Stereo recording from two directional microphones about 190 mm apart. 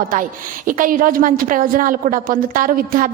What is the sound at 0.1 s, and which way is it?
A woman's voice, 45° right (ahead or behind).